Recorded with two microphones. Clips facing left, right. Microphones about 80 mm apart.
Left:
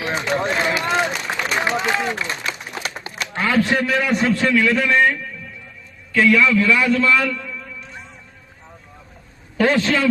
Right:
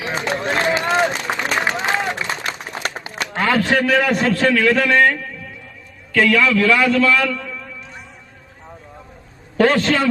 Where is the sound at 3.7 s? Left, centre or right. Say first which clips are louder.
Right 3 dB; right.